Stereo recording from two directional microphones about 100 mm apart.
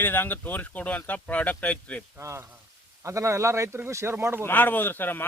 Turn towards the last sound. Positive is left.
turn(degrees=20)  # may be behind; listen again after turning